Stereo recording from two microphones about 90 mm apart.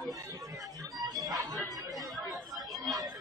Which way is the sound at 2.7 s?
Centre (ahead or behind).